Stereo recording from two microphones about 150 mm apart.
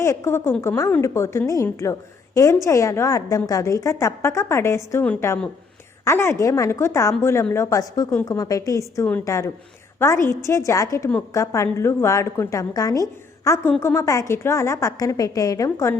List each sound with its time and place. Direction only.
0.0 s a woman's voice: 15° left (ahead or behind)